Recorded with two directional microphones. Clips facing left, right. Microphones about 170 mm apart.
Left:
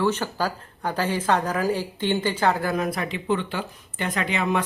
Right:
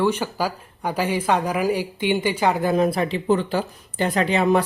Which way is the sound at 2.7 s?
30° right (ahead or behind).